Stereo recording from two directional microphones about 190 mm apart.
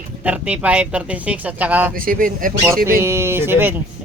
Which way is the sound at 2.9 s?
15° right (ahead or behind).